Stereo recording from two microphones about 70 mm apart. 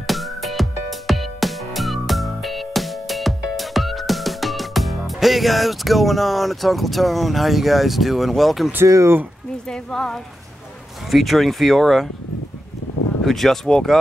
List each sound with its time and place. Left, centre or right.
0.0 s music: centre
8.8 s speech: right
9.7 s speech: centre
13.2 s speech: centre